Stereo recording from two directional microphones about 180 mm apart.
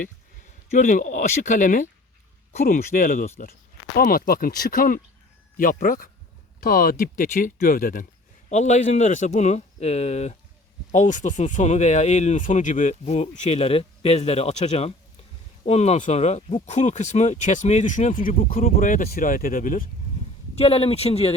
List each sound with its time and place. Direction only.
0.7 s speech: 45° left (ahead or behind)
3.9 s speech: 55° left (ahead or behind)
8.4 s speech: 40° left (ahead or behind)
20.6 s speech: 35° left (ahead or behind)